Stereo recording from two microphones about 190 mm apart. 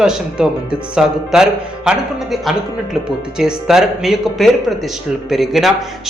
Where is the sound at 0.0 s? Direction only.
5° right (ahead or behind).